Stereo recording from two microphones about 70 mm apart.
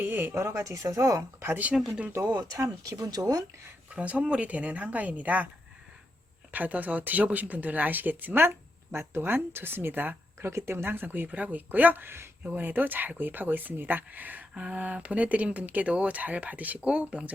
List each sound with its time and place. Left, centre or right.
0.0 s speech: right
0.3 s speech: right
1.7 s speech: centre
2.2 s speech: right
3.9 s speech: centre
6.5 s speech: right